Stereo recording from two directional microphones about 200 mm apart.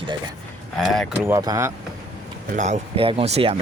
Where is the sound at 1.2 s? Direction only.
15° right (ahead or behind).